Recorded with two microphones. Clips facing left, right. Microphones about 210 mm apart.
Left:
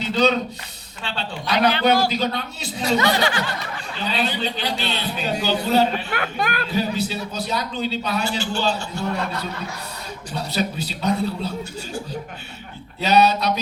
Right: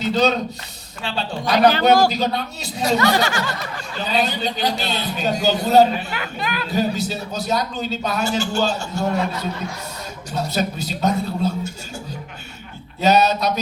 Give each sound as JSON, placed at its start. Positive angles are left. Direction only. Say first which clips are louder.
{"t": 0.0, "sound": "a man's voice", "louder": "right 1 dB", "side_deg": -45}
{"t": 6.1, "sound": "speech", "louder": "left 2 dB", "side_deg": 55}
{"t": 6.7, "sound": "a man's voice", "louder": "right 5 dB", "side_deg": -40}
{"t": 10.3, "sound": "a man's voice", "louder": "right 2 dB", "side_deg": -45}
{"t": 13.0, "sound": "a man's voice", "louder": "right 1 dB", "side_deg": -45}